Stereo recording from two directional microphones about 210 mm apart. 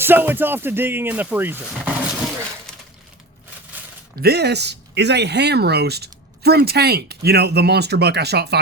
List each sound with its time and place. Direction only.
0.0 s speech: 10° right (ahead or behind)
4.2 s speech: 50° right (ahead or behind)